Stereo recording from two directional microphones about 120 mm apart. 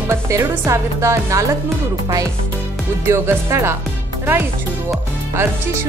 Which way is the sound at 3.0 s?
20° right (ahead or behind).